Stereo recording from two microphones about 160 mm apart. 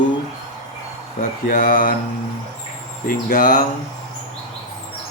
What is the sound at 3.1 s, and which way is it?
Speech, 55° left (ahead or behind).